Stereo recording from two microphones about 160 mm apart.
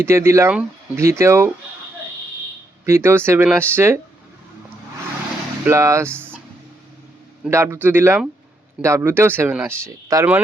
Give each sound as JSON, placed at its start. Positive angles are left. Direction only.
{"t": 0.0, "sound": "speech", "side_deg": -15}
{"t": 2.8, "sound": "speech", "side_deg": -15}
{"t": 5.6, "sound": "speech", "side_deg": -20}
{"t": 6.1, "sound": "a sound", "side_deg": 10}
{"t": 7.5, "sound": "speech", "side_deg": -15}